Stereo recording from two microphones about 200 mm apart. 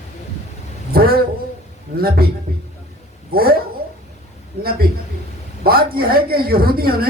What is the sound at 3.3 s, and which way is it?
Speech, 50° right (ahead or behind).